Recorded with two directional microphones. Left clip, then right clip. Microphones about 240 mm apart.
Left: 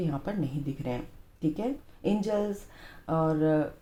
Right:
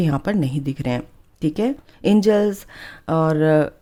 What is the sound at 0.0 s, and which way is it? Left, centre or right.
Speech, right.